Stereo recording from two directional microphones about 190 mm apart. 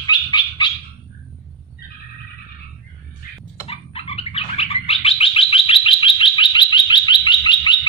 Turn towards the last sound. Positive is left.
turn(degrees=25)  # may be behind; listen again after turning